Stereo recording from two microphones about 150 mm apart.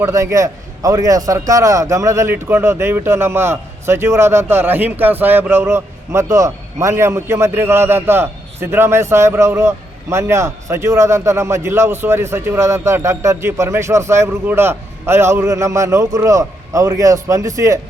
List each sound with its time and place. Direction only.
0.0 s a man's voice: 20° right (ahead or behind)